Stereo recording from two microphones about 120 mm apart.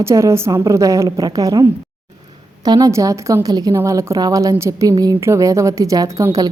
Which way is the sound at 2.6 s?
30° right (ahead or behind).